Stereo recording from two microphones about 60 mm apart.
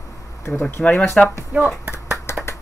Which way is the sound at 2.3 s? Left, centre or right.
Left.